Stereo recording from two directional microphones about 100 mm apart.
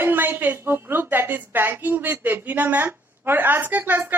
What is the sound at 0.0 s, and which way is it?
Speech, 20° right (ahead or behind).